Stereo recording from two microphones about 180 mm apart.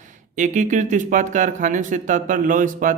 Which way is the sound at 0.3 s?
40° right (ahead or behind).